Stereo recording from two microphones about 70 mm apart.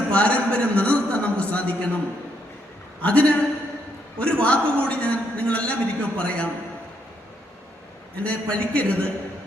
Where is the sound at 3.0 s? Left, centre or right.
Centre.